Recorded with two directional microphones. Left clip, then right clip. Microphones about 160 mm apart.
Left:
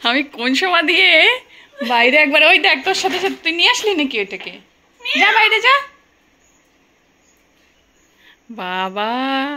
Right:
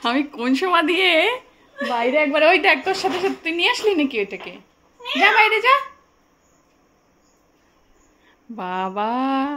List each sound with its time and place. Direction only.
0.0 s a woman's voice: 5° right (ahead or behind)
2.0 s a woman's voice: 15° left (ahead or behind)
2.4 s a woman's voice: centre (ahead or behind)
8.3 s speech: 5° right (ahead or behind)